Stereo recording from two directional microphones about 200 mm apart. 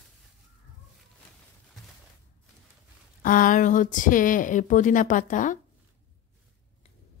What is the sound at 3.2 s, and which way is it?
A woman's voice, 45° left (ahead or behind).